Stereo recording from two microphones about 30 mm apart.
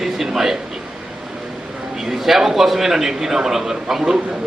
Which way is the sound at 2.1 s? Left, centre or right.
Centre.